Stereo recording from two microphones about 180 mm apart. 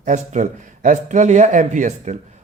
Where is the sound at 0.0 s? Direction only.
40° right (ahead or behind).